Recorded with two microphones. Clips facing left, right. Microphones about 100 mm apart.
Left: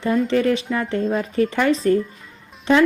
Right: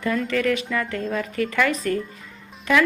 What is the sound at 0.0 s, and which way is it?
A woman's voice, 30° left (ahead or behind).